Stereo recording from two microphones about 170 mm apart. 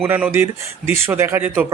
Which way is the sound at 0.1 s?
10° right (ahead or behind).